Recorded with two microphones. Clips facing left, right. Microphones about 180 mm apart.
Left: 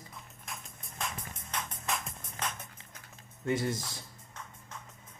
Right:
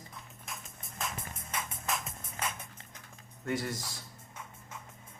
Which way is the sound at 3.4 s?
25° left (ahead or behind).